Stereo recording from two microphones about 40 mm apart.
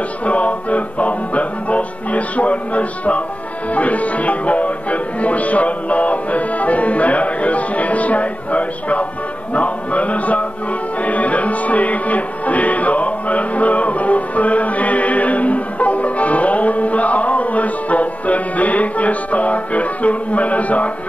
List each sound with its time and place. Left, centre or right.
0.2 s music: left